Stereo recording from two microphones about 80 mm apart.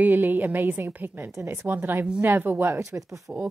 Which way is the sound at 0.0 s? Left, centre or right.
Right.